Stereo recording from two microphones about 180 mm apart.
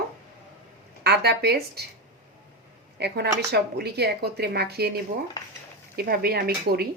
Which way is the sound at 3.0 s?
65° right (ahead or behind).